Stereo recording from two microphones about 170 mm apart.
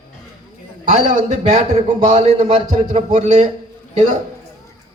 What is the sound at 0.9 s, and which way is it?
A man's voice, 45° right (ahead or behind).